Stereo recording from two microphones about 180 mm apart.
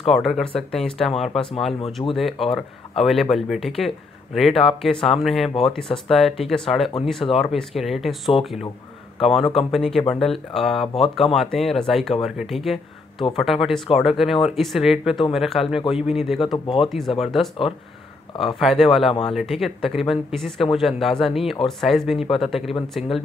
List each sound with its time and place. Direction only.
0.0 s speech: centre (ahead or behind)
2.0 s speech: 20° left (ahead or behind)
2.4 s speech: centre (ahead or behind)
9.2 s speech: centre (ahead or behind)
16.5 s speech: 30° left (ahead or behind)
17.2 s speech: centre (ahead or behind)
18.6 s speech: centre (ahead or behind)